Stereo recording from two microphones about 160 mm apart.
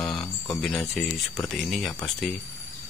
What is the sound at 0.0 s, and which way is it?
Speech, 5° left (ahead or behind).